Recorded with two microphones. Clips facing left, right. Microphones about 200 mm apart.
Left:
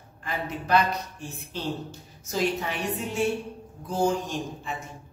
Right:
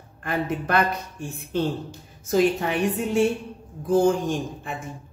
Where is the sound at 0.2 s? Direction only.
55° right (ahead or behind).